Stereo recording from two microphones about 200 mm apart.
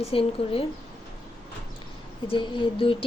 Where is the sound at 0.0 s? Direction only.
30° left (ahead or behind).